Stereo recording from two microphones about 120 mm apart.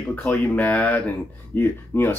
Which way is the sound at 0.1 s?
15° left (ahead or behind).